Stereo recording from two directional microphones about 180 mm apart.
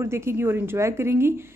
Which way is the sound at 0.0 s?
15° right (ahead or behind).